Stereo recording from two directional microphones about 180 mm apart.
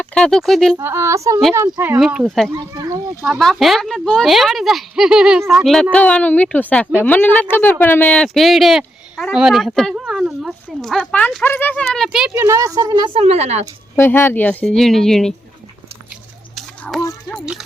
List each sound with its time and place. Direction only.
0.0 s speech: 5° left (ahead or behind)
0.8 s speech: 15° right (ahead or behind)
2.0 s speech: 5° right (ahead or behind)
2.5 s speech: 20° right (ahead or behind)
3.2 s speech: centre (ahead or behind)
12.3 s speech: 15° right (ahead or behind)
13.2 s speech: 35° right (ahead or behind)
13.9 s speech: 15° left (ahead or behind)
16.6 s a sound: centre (ahead or behind)